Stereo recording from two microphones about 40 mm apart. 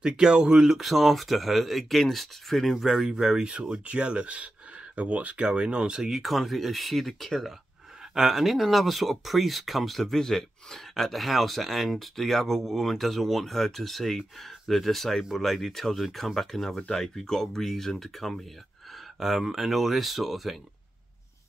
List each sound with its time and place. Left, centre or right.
0.0 s speech: centre
2.9 s speech: centre
3.5 s speech: right
6.0 s speech: centre
8.0 s speech: centre